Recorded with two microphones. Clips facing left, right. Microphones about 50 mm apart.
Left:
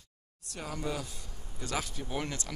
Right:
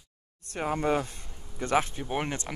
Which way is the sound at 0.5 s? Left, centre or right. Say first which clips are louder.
Right 9 dB; right.